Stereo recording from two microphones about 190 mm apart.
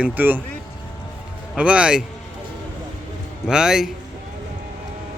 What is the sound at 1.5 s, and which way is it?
Speech, 5° right (ahead or behind).